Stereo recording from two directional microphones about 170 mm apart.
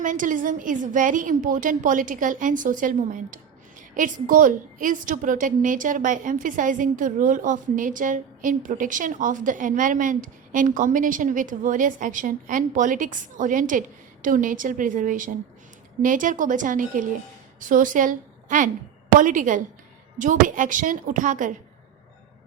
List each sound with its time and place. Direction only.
0.0 s a woman's voice: 50° right (ahead or behind)